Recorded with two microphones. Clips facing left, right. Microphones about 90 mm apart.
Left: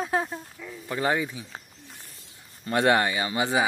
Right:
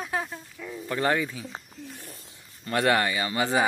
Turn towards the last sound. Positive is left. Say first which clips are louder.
# even
turn(degrees=20)  # may be behind; listen again after turning